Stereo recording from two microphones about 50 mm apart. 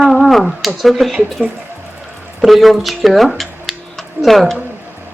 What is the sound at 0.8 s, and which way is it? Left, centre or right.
Speech, centre.